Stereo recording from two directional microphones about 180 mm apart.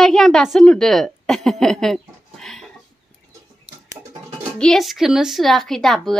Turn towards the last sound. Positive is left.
turn(degrees=0)  # may be behind; listen again after turning